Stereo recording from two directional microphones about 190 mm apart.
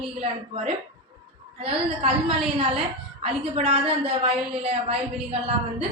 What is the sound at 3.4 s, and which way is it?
A woman's voice, 30° right (ahead or behind).